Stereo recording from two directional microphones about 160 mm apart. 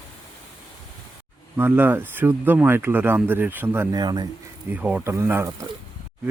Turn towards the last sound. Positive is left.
turn(degrees=-15)  # may be behind; listen again after turning